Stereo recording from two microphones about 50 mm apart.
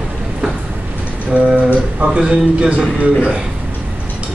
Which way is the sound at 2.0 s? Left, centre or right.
Right.